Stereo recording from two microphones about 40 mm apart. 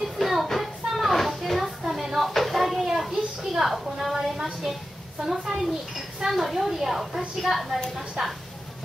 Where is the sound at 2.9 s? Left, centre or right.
Centre.